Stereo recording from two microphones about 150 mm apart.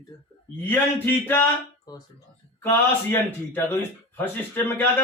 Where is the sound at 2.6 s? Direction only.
15° left (ahead or behind).